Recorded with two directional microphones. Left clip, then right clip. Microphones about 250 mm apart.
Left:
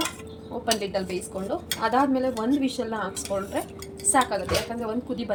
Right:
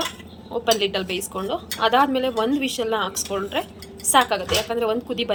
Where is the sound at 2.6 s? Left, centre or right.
Centre.